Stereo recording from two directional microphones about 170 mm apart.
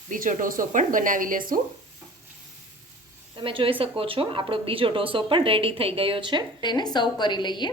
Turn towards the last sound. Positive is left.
turn(degrees=25)  # may be behind; listen again after turning